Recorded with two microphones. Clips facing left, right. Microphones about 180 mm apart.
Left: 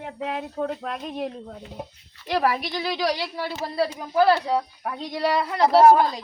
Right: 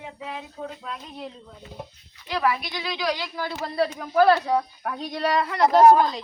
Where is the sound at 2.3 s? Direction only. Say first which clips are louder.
Left 2 dB; 40° left (ahead or behind).